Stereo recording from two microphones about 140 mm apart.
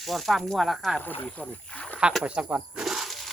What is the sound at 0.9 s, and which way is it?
Speech, 10° left (ahead or behind).